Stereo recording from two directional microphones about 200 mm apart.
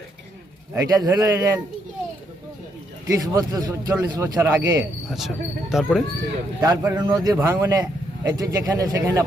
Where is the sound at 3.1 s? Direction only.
20° right (ahead or behind).